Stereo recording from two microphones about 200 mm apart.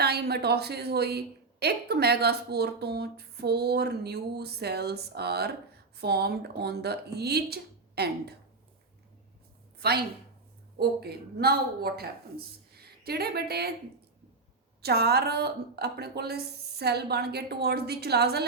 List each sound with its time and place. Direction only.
0.0 s a woman's voice: 55° right (ahead or behind)
9.8 s a woman's voice: 55° right (ahead or behind)
14.8 s a woman's voice: 55° right (ahead or behind)